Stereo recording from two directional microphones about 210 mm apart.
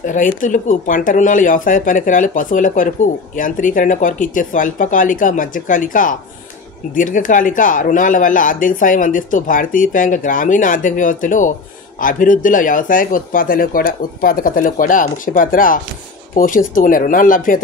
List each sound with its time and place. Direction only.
0.0 s speech: 40° left (ahead or behind)